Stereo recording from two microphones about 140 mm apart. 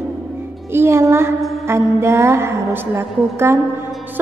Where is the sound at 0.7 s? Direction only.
20° right (ahead or behind).